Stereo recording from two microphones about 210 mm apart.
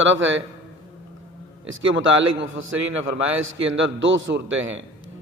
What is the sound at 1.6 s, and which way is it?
A man's voice, 65° right (ahead or behind).